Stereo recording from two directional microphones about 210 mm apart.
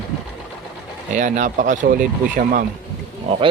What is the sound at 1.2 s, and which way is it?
Speech, 35° right (ahead or behind).